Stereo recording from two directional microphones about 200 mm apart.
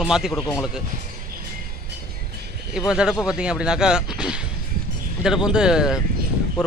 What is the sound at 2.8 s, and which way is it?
Speech, 5° right (ahead or behind).